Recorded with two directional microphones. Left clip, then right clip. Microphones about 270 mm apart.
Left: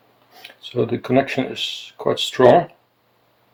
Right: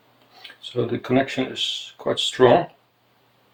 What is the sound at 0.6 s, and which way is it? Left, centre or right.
Speech, left.